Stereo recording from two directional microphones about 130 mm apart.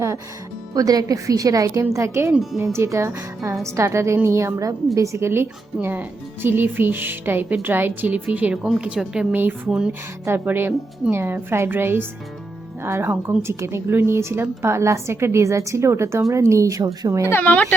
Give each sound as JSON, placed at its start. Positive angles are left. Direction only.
{"t": 0.7, "sound": "a woman's voice", "side_deg": -30}
{"t": 2.3, "sound": "speech", "side_deg": 0}
{"t": 2.7, "sound": "a woman's voice", "side_deg": -20}
{"t": 17.3, "sound": "speech", "side_deg": 15}